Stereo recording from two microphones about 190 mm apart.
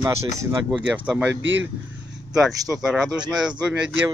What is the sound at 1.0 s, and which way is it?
A man's voice, 10° right (ahead or behind).